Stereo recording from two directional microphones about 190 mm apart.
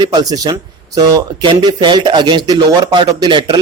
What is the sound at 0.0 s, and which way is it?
A man's voice, 20° right (ahead or behind).